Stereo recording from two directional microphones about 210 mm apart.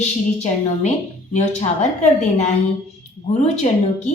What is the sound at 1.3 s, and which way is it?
Speech, 35° left (ahead or behind).